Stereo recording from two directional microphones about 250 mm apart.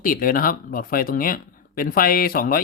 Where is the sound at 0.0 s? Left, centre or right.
Left.